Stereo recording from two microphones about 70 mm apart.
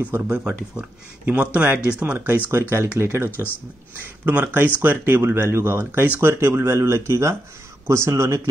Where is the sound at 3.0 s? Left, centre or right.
Right.